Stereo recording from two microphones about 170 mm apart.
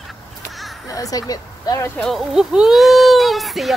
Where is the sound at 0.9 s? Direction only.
20° left (ahead or behind).